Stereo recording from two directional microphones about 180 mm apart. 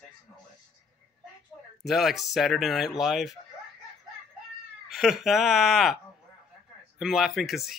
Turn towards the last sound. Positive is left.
turn(degrees=0)  # may be behind; listen again after turning